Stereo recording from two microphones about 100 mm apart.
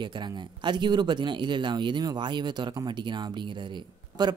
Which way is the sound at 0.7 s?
50° right (ahead or behind).